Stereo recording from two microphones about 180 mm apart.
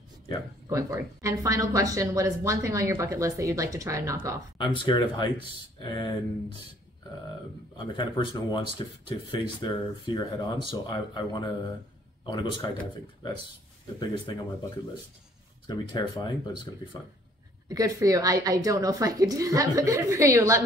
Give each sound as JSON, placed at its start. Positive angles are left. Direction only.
{"t": 0.7, "sound": "a woman's voice", "side_deg": -20}
{"t": 4.6, "sound": "speech", "side_deg": 25}
{"t": 7.7, "sound": "speech", "side_deg": 25}
{"t": 13.9, "sound": "speech", "side_deg": 25}
{"t": 15.6, "sound": "speech", "side_deg": 25}
{"t": 17.6, "sound": "a woman's voice", "side_deg": -20}